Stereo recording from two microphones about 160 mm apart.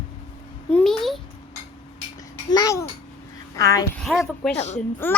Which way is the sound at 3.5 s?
20° left (ahead or behind).